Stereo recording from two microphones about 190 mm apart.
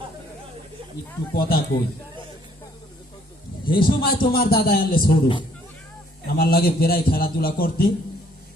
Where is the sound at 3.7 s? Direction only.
50° left (ahead or behind).